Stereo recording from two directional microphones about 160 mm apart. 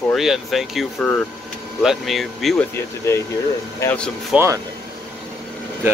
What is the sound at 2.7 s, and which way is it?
Speech, 15° left (ahead or behind).